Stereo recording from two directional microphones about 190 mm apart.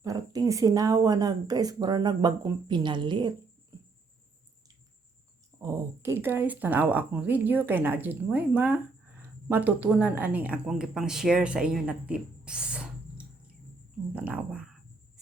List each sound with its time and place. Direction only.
0.0 s a woman's voice: 20° right (ahead or behind)
5.5 s speech: 15° right (ahead or behind)